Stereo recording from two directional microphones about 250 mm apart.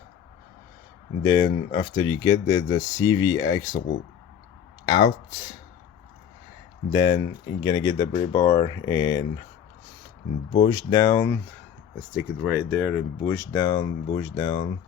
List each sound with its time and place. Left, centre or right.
1.2 s speech: centre
4.9 s speech: centre
6.9 s speech: centre
10.5 s speech: centre
12.4 s speech: centre